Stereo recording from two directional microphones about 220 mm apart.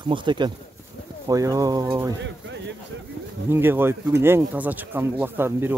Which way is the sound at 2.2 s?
55° right (ahead or behind).